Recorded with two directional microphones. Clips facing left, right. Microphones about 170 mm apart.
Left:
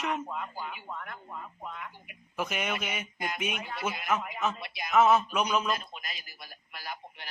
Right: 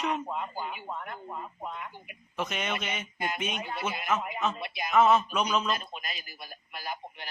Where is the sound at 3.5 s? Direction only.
35° right (ahead or behind).